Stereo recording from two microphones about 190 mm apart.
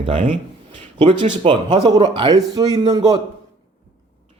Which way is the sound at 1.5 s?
25° right (ahead or behind).